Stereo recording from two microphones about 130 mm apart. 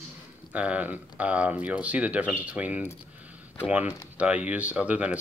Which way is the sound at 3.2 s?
10° right (ahead or behind).